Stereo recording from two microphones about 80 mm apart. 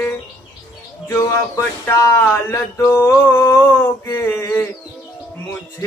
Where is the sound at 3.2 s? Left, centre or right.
Left.